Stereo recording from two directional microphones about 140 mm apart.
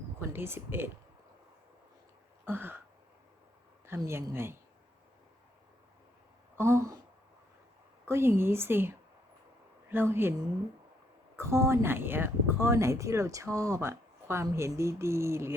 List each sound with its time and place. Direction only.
0.2 s speech: 15° right (ahead or behind)
2.4 s a sound: 15° right (ahead or behind)
3.8 s speech: 20° right (ahead or behind)
6.6 s speech: 20° right (ahead or behind)
8.0 s speech: 20° right (ahead or behind)
11.3 s speech: 20° right (ahead or behind)